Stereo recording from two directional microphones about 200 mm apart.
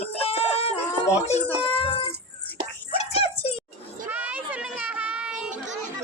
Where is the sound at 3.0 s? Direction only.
30° left (ahead or behind).